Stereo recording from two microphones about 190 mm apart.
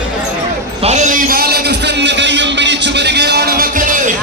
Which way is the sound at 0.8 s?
40° right (ahead or behind).